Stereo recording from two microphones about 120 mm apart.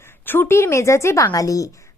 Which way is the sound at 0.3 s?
20° left (ahead or behind).